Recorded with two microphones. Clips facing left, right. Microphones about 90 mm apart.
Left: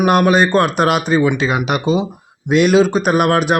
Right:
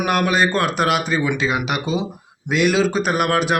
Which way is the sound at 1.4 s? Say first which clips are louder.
Left 3 dB; 45° left (ahead or behind).